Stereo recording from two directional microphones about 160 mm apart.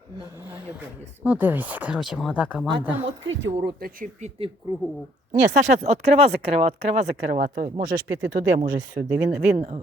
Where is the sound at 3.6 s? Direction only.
65° right (ahead or behind).